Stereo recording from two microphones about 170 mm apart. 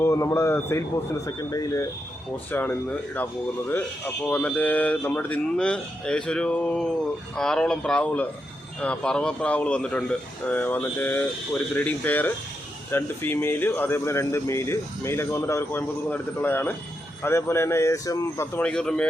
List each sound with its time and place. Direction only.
0.0 s speech: 15° left (ahead or behind)